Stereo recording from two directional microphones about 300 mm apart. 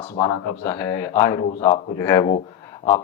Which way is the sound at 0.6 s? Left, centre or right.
Centre.